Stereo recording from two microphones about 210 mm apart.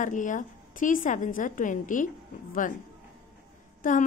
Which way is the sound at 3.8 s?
40° left (ahead or behind).